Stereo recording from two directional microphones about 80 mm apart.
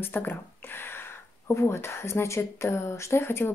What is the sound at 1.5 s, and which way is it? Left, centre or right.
Speech, left.